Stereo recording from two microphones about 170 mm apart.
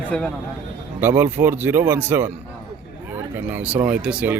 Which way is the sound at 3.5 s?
10° right (ahead or behind).